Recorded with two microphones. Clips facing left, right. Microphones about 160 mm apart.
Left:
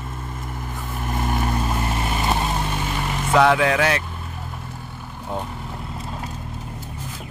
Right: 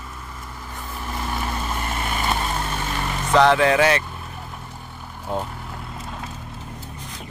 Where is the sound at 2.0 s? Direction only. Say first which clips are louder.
Even; 15° left (ahead or behind).